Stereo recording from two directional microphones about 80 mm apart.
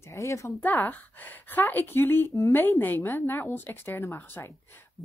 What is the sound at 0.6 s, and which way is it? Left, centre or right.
Speech, left.